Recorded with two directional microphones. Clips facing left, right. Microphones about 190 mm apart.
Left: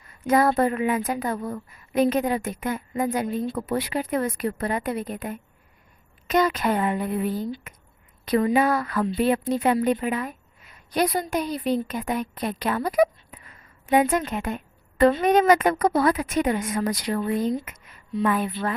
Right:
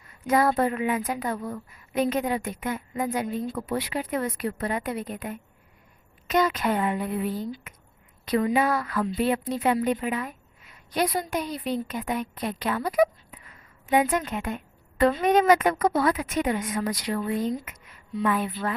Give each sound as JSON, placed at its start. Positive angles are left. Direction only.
{"t": 0.3, "sound": "a woman's voice", "side_deg": 45}
{"t": 17.2, "sound": "speech", "side_deg": 30}
{"t": 18.2, "sound": "a woman's voice", "side_deg": 40}